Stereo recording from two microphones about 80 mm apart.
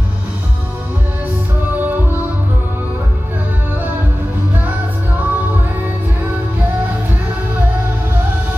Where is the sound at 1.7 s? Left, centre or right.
Right.